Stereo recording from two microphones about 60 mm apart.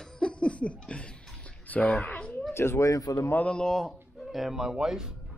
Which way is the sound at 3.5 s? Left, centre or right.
Centre.